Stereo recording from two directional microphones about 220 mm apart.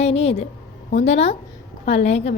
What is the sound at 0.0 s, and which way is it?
A woman's voice, 25° left (ahead or behind).